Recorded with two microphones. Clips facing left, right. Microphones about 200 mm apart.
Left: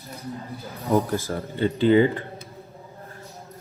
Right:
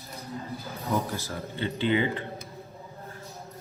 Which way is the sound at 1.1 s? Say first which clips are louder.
Left 7 dB; 45° left (ahead or behind).